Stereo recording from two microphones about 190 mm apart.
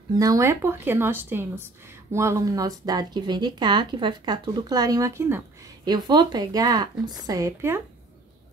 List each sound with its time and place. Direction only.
0.2 s speech: 15° right (ahead or behind)